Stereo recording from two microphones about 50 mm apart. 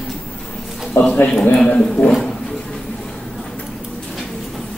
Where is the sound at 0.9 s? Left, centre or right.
Left.